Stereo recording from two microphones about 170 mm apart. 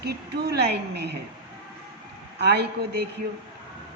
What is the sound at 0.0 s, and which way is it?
Speech, 70° right (ahead or behind).